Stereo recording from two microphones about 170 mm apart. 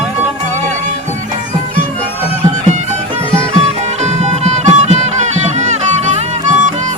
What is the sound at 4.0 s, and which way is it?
Music, 40° right (ahead or behind).